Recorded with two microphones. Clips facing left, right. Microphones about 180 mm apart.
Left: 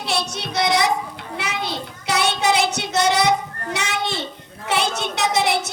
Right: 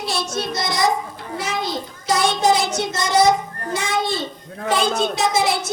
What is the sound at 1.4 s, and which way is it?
Child singing, 65° left (ahead or behind).